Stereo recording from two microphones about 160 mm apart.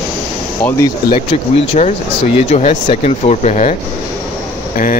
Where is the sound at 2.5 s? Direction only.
45° left (ahead or behind).